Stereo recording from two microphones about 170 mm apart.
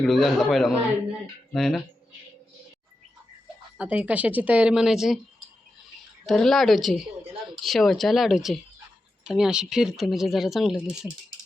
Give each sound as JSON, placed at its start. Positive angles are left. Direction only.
{"t": 0.0, "sound": "speech", "side_deg": 0}
{"t": 3.8, "sound": "speech", "side_deg": -10}
{"t": 6.2, "sound": "speech", "side_deg": 0}